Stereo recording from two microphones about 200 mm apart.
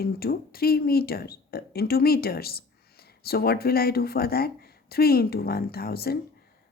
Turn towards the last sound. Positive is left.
turn(degrees=50)  # may be behind; listen again after turning